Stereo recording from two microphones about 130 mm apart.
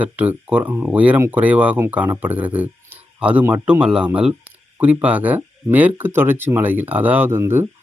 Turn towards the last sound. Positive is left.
turn(degrees=-20)  # may be behind; listen again after turning